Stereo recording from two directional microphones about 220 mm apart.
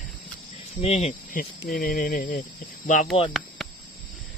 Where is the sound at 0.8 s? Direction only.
30° left (ahead or behind).